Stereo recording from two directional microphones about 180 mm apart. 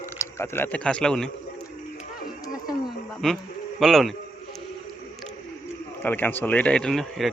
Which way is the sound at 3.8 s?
Centre (ahead or behind).